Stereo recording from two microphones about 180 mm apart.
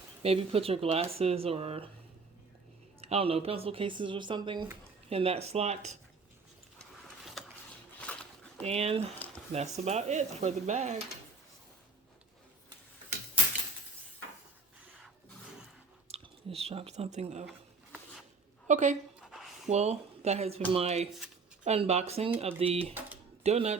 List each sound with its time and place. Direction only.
0.2 s speech: 35° right (ahead or behind)
3.0 s speech: 35° right (ahead or behind)
7.4 s a sound: centre (ahead or behind)
8.6 s speech: 35° right (ahead or behind)
16.0 s speech: 35° right (ahead or behind)
18.7 s speech: 40° right (ahead or behind)
19.3 s a sound: centre (ahead or behind)
19.6 s speech: 40° right (ahead or behind)